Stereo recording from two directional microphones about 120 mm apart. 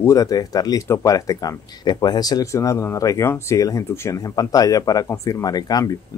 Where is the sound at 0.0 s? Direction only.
30° left (ahead or behind).